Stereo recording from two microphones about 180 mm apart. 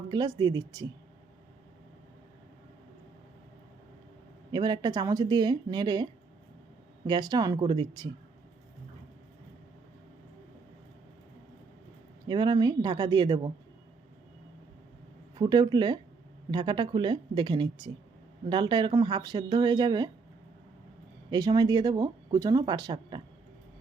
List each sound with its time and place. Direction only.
0.1 s speech: 25° right (ahead or behind)
4.5 s speech: 25° right (ahead or behind)
7.1 s speech: 20° right (ahead or behind)
12.3 s speech: 25° right (ahead or behind)
15.4 s speech: 25° right (ahead or behind)
21.2 s speech: 20° right (ahead or behind)